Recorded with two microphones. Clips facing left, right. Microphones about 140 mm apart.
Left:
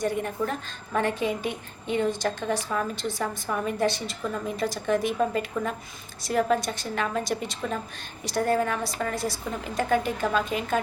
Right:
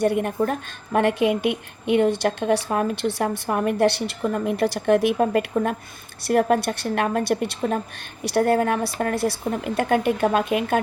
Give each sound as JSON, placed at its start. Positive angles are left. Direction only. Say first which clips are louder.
{"t": 0.0, "sound": "a woman's voice", "louder": "right 6 dB", "side_deg": -60}